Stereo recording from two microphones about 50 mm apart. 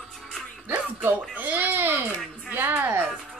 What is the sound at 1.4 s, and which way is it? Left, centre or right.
A woman's voice, right.